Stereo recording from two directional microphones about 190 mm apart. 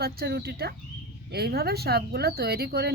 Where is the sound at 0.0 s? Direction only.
55° right (ahead or behind).